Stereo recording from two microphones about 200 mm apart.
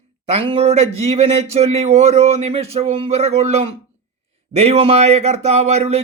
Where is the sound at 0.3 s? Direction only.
30° right (ahead or behind).